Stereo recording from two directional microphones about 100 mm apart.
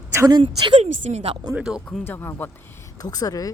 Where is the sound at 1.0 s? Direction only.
90° right.